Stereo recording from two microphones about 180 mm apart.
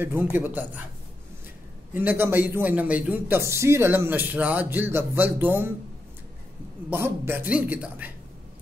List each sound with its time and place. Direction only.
0.0 s a man's voice: 10° right (ahead or behind)
2.0 s a man's voice: 10° right (ahead or behind)
6.9 s a man's voice: 10° right (ahead or behind)